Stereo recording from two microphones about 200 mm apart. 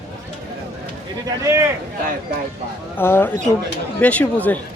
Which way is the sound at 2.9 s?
10° left (ahead or behind).